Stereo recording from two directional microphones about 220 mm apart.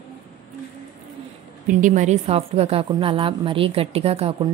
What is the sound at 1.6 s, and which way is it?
A woman's voice, 35° right (ahead or behind).